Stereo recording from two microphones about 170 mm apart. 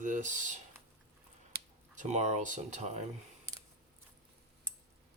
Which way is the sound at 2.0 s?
45° right (ahead or behind).